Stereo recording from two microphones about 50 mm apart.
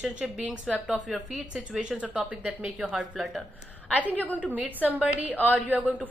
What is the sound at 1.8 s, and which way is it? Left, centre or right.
A woman's voice, right.